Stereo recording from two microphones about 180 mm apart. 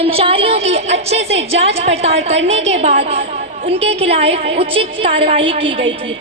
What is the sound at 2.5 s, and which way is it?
A woman's voice, 35° right (ahead or behind).